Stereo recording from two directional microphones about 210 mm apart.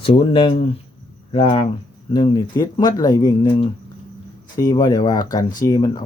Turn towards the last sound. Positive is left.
turn(degrees=15)  # may be behind; listen again after turning